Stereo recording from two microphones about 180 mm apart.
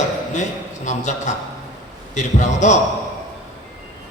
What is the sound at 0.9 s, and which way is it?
A man's voice, 40° left (ahead or behind).